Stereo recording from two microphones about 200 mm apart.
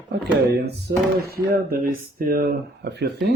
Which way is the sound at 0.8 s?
50° right (ahead or behind).